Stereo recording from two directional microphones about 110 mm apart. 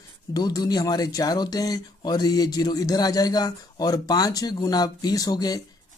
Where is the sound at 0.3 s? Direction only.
35° left (ahead or behind).